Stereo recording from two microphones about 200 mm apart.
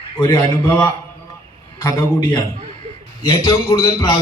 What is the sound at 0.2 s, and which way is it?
A man's voice, 20° left (ahead or behind).